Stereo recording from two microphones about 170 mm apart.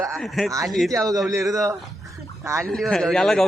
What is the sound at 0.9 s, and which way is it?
A man's voice, 20° right (ahead or behind).